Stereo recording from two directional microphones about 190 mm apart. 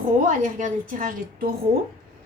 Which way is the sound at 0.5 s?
45° right (ahead or behind).